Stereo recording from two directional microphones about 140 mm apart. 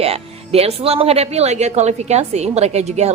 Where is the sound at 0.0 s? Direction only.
45° right (ahead or behind).